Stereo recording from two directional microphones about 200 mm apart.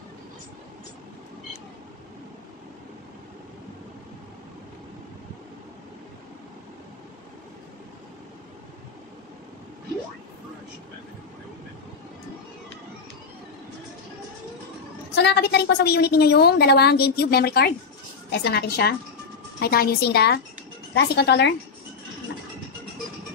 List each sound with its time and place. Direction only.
15.1 s a woman's voice: 55° left (ahead or behind)